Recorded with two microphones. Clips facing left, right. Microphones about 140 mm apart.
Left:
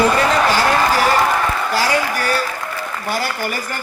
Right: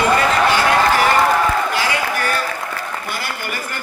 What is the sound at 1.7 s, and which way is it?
Applause, 40° left (ahead or behind).